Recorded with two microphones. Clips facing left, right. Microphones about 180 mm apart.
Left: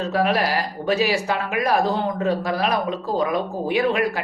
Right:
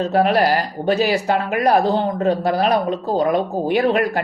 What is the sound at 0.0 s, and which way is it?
Speech, 35° right (ahead or behind).